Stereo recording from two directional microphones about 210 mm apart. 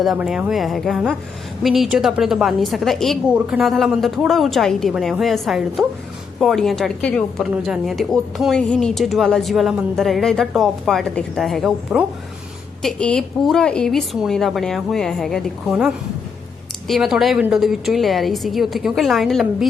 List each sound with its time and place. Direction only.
0.0 s speech: centre (ahead or behind)